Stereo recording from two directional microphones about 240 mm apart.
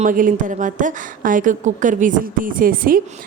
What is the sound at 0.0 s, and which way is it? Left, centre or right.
A woman's voice, right.